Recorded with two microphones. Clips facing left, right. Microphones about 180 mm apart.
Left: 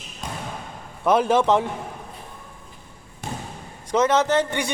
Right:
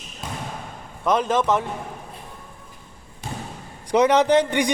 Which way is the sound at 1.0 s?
10° left (ahead or behind).